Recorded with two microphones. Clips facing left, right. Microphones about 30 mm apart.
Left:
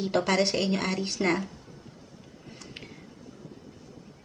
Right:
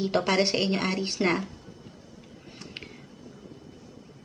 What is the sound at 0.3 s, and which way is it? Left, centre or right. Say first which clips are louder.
Speech: right 1 dB; right.